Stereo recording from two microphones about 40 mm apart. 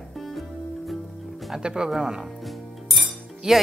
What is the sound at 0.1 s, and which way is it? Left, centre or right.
Music, centre.